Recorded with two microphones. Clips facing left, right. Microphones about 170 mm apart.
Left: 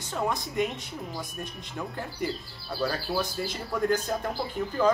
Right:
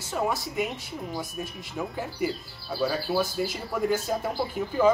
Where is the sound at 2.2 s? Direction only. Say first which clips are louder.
Right 2 dB; 5° right (ahead or behind).